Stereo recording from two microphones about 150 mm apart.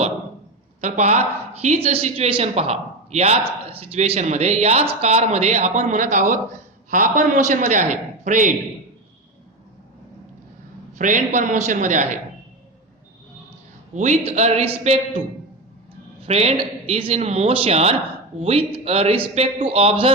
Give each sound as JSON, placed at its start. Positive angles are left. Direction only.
{"t": 0.8, "sound": "a man's voice", "side_deg": -50}
{"t": 10.9, "sound": "a man's voice", "side_deg": -60}
{"t": 13.9, "sound": "a man's voice", "side_deg": -50}
{"t": 16.2, "sound": "a man's voice", "side_deg": -45}